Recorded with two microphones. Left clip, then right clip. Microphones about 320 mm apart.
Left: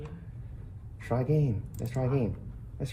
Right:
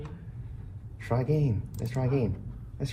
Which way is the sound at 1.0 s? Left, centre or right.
Right.